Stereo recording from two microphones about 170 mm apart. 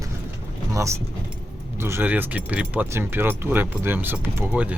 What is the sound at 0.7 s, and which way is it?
Speech, 20° right (ahead or behind).